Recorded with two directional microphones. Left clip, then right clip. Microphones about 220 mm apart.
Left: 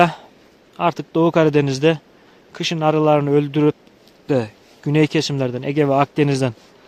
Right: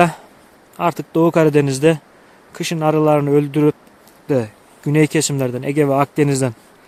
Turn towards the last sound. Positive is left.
turn(degrees=5)  # may be behind; listen again after turning